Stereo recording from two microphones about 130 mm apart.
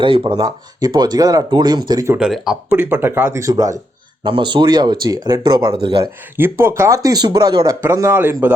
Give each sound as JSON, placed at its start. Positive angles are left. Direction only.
{"t": 0.0, "sound": "speech", "side_deg": -40}
{"t": 2.1, "sound": "speech", "side_deg": -5}
{"t": 2.7, "sound": "speech", "side_deg": -15}
{"t": 4.2, "sound": "speech", "side_deg": -40}
{"t": 6.3, "sound": "speech", "side_deg": -15}